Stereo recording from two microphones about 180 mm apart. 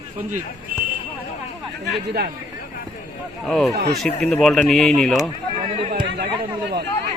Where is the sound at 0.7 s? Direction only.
50° right (ahead or behind).